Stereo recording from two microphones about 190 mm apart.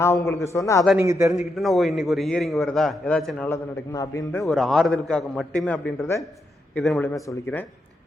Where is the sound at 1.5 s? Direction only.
Centre (ahead or behind).